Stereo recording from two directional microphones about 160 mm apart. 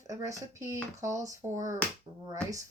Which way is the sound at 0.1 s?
20° right (ahead or behind).